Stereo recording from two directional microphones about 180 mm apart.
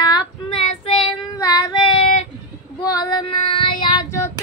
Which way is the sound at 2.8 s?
20° left (ahead or behind).